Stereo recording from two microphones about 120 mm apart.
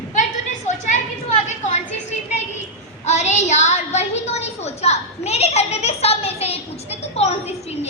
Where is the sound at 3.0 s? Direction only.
70° left (ahead or behind).